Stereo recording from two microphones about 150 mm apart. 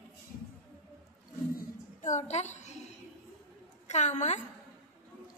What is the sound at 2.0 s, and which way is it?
Speech, 50° left (ahead or behind).